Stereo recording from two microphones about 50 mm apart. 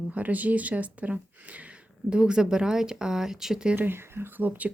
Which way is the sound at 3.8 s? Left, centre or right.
Right.